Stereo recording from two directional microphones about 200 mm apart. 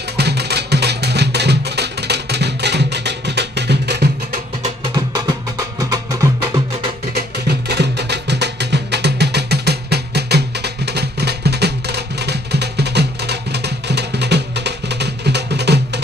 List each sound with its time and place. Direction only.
0.2 s music: 55° right (ahead or behind)
5.1 s music: 20° right (ahead or behind)
7.1 s music: 55° right (ahead or behind)